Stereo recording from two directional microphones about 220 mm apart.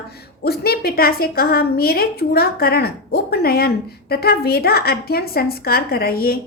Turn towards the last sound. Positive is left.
turn(degrees=45)  # may be behind; listen again after turning